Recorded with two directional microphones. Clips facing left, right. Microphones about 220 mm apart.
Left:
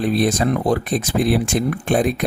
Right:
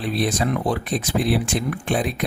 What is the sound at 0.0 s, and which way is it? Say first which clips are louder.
Speech: left 5 dB; 45° left (ahead or behind).